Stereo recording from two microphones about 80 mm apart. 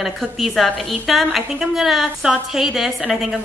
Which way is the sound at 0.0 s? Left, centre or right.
Centre.